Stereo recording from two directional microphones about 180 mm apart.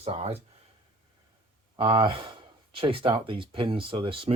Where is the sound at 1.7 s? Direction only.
30° right (ahead or behind).